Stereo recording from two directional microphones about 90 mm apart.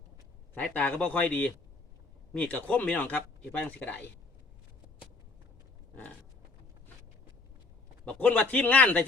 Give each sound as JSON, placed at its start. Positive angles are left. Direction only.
{"t": 0.5, "sound": "speech", "side_deg": 15}
{"t": 8.0, "sound": "speech", "side_deg": 15}